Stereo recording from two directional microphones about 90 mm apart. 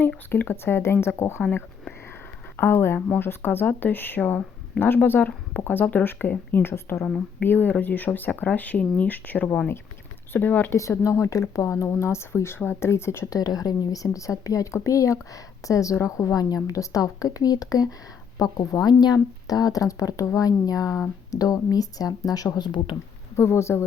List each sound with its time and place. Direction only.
0.3 s speech: 25° left (ahead or behind)
2.6 s speech: 25° left (ahead or behind)
7.0 s a woman's voice: 10° left (ahead or behind)
10.8 s speech: 35° left (ahead or behind)
13.3 s speech: 45° left (ahead or behind)
23.4 s speech: 30° left (ahead or behind)